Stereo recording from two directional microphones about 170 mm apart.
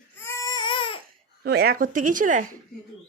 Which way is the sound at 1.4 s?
70° right (ahead or behind).